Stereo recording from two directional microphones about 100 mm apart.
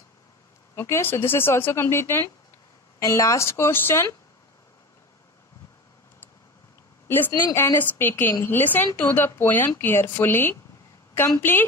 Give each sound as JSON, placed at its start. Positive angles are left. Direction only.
{"t": 0.7, "sound": "a woman's voice", "side_deg": 25}
{"t": 7.1, "sound": "a woman's voice", "side_deg": 20}